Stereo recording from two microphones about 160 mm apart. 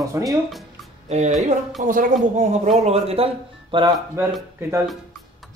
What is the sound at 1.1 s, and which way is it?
Speech, 45° right (ahead or behind).